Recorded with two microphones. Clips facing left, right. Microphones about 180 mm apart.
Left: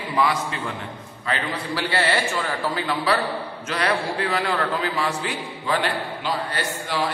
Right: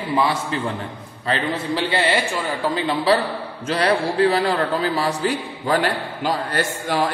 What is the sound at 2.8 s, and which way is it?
A man's voice, 30° right (ahead or behind).